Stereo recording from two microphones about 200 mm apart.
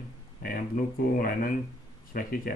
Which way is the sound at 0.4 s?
45° left (ahead or behind).